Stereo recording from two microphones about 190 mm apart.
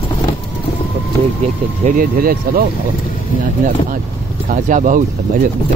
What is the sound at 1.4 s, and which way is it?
Speech, 40° right (ahead or behind).